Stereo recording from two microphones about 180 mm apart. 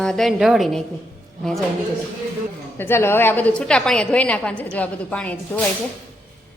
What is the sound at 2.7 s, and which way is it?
A woman's voice, 15° left (ahead or behind).